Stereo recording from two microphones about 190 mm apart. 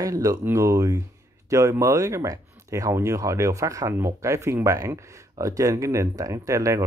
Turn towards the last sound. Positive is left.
turn(degrees=-15)  # may be behind; listen again after turning